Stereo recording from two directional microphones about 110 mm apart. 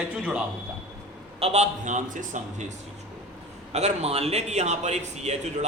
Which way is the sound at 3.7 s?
80° right.